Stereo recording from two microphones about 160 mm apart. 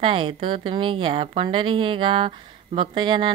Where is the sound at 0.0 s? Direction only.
35° right (ahead or behind).